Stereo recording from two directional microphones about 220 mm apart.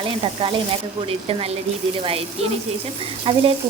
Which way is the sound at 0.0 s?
25° right (ahead or behind).